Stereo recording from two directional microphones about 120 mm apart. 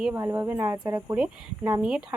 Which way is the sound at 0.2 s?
20° right (ahead or behind).